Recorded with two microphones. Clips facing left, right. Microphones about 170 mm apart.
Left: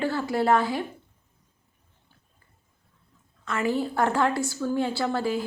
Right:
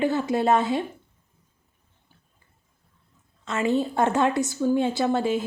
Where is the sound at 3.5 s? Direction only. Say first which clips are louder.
Right 3 dB; 20° right (ahead or behind).